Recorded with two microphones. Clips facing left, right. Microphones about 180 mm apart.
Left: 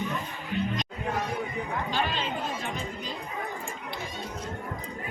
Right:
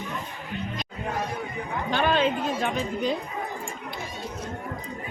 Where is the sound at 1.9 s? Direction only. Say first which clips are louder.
Right 11 dB; 60° right (ahead or behind).